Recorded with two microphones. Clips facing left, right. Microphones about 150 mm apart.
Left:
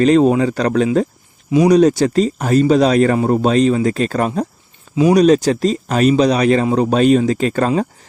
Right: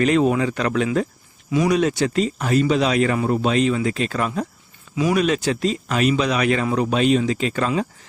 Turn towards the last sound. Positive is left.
turn(degrees=40)  # may be behind; listen again after turning